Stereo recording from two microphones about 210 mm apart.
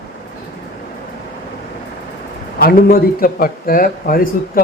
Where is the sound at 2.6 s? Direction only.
45° left (ahead or behind).